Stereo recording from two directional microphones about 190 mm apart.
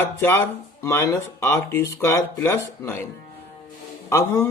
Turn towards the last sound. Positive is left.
turn(degrees=15)  # may be behind; listen again after turning